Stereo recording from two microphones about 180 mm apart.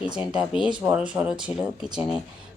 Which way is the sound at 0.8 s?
5° right (ahead or behind).